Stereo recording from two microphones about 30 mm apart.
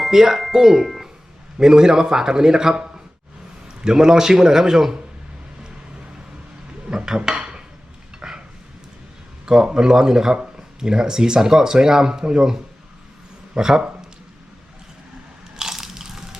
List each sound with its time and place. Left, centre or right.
0.1 s speech: centre
6.9 s speech: right
7.3 s dishes: right
8.2 s a sound: right
9.6 s speech: right
15.5 s biting: centre